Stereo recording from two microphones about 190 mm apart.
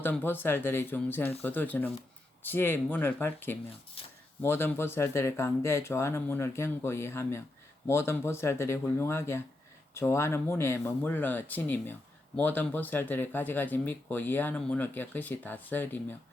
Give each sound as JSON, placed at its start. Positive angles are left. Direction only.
{"t": 0.0, "sound": "speech", "side_deg": 10}
{"t": 4.0, "sound": "speech", "side_deg": 30}
{"t": 4.4, "sound": "speech", "side_deg": 10}